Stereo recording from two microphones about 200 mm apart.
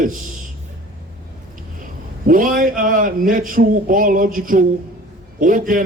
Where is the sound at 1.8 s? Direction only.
45° right (ahead or behind).